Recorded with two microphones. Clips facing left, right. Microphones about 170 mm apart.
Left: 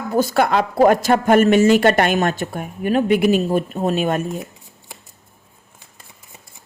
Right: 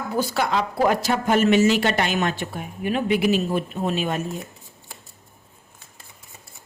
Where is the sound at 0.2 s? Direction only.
55° left (ahead or behind).